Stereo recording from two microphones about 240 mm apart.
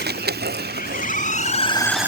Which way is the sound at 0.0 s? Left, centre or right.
Right.